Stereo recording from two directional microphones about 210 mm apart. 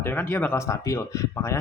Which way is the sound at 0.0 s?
10° left (ahead or behind).